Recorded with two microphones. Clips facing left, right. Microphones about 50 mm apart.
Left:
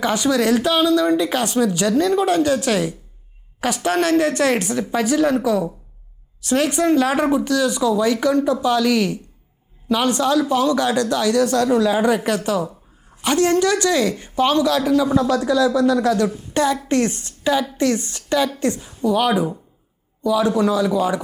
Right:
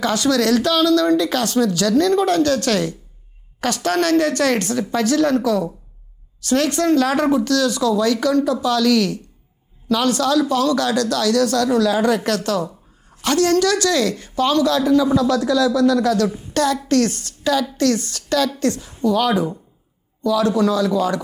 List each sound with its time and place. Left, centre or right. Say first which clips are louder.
0.0 s a man's voice: even; centre
15.1 s a man's voice: even; left